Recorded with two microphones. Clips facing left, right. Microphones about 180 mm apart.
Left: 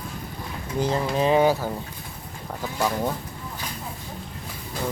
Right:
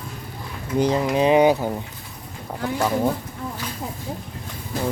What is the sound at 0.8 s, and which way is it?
Speech, 20° right (ahead or behind).